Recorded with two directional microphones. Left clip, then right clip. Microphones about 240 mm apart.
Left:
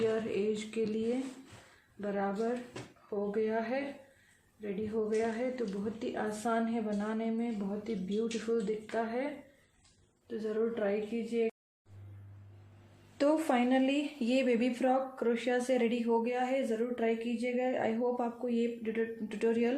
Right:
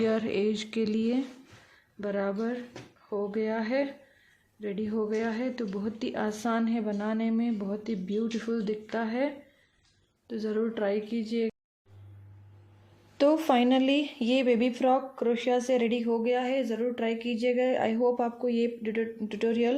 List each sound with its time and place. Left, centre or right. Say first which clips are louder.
0.0 s a woman's voice: right 4 dB; right
13.1 s a woman's voice: right 5 dB; right